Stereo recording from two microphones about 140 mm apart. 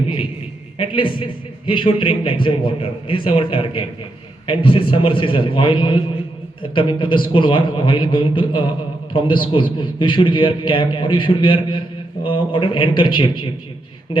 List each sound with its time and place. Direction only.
0.9 s a man's voice: 35° left (ahead or behind)